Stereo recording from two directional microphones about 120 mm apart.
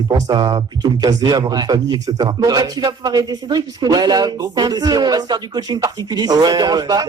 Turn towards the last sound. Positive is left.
turn(degrees=-35)  # may be behind; listen again after turning